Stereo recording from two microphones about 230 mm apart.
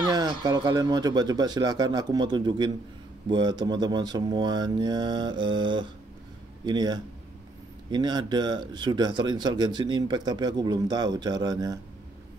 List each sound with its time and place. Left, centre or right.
0.1 s speech: centre
3.3 s mantra: centre
6.6 s speech: centre